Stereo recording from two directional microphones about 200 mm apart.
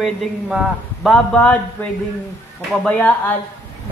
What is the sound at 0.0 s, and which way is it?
A man's voice, centre (ahead or behind).